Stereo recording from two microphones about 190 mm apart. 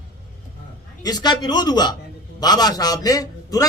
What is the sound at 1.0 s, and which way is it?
A man's voice, 20° left (ahead or behind).